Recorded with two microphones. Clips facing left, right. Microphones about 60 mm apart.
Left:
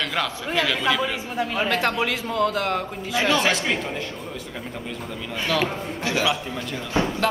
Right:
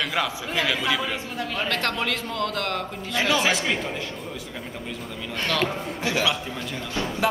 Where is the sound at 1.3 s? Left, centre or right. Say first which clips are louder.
Left 5 dB; centre.